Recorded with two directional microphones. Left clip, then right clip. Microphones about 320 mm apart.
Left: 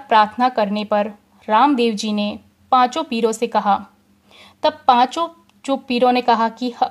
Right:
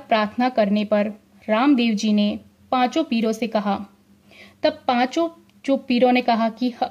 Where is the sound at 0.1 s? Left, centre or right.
Left.